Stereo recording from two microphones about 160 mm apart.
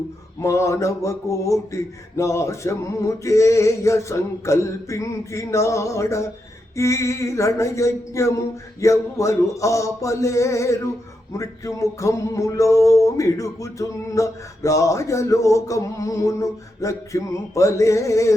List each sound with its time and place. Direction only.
0.3 s music: 20° left (ahead or behind)